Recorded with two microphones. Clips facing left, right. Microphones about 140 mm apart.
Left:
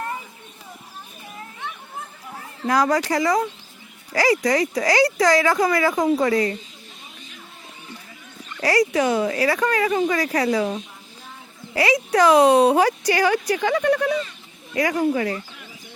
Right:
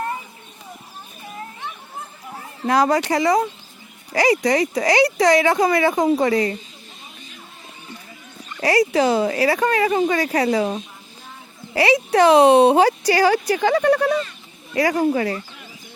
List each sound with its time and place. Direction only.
2.6 s speech: 25° right (ahead or behind)
8.5 s speech: 25° right (ahead or behind)